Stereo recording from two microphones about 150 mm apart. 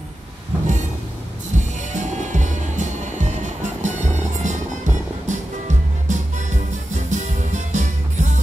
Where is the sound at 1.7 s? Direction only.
55° right (ahead or behind).